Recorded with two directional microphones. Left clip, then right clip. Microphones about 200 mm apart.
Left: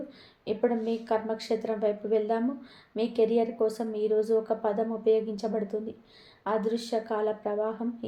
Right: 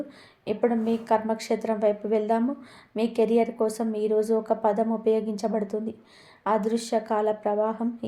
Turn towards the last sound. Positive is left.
turn(degrees=-25)  # may be behind; listen again after turning